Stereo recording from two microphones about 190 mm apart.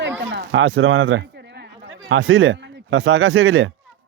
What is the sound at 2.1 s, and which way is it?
Speech, 90° right.